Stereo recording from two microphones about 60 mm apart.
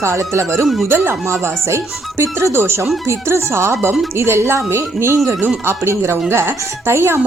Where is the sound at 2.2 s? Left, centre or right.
Right.